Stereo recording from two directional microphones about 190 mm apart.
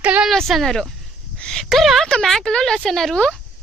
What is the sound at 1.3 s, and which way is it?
A woman's voice, 5° left (ahead or behind).